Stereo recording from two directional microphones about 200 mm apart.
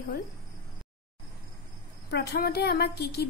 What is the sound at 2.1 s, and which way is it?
A woman's voice, 55° left (ahead or behind).